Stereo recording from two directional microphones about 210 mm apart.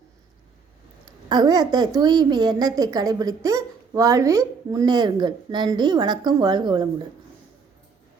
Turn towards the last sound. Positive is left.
turn(degrees=-20)  # may be behind; listen again after turning